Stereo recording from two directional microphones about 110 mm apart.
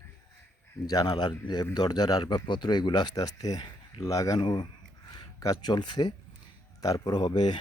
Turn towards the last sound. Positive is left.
turn(degrees=40)  # may be behind; listen again after turning